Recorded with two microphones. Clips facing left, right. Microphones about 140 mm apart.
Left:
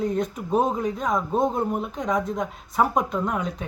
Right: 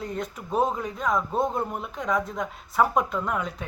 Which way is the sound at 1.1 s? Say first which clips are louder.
Left 1 dB; 20° left (ahead or behind).